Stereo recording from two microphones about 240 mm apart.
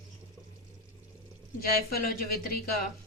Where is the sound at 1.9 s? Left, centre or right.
Left.